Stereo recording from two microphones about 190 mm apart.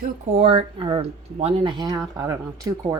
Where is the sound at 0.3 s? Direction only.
30° right (ahead or behind).